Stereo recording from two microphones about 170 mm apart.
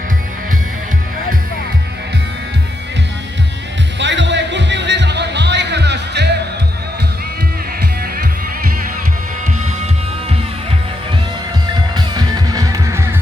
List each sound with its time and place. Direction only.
3.9 s music: 90° right
11.9 s music: 25° right (ahead or behind)